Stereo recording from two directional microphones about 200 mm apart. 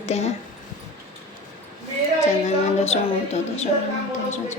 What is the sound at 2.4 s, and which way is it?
Speech, 35° left (ahead or behind).